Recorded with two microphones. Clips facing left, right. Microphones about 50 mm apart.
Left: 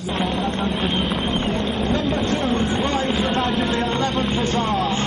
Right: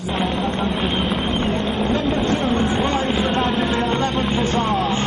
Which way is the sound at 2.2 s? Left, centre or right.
Centre.